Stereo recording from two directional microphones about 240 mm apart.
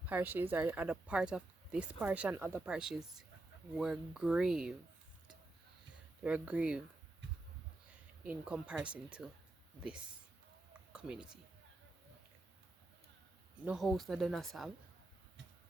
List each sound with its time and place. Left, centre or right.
0.0 s speech: centre
6.2 s speech: centre
8.2 s speech: centre
10.9 s speech: centre
13.7 s speech: centre